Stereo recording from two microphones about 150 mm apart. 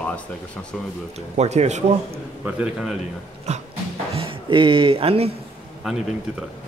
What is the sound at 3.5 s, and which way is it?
Dog, 50° right (ahead or behind).